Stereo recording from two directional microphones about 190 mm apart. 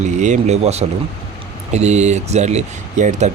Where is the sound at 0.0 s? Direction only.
40° right (ahead or behind).